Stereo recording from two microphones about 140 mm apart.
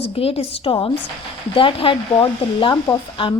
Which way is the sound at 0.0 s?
45° left (ahead or behind).